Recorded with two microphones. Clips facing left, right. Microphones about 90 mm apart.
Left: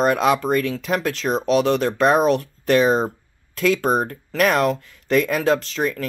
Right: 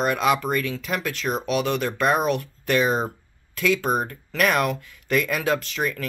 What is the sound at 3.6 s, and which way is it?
Speech, 45° left (ahead or behind).